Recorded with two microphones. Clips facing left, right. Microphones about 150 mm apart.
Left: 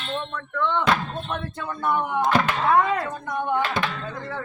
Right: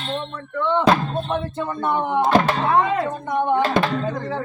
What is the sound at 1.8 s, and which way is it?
Speech, 25° right (ahead or behind).